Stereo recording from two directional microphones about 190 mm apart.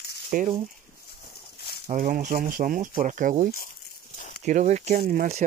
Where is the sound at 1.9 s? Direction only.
45° right (ahead or behind).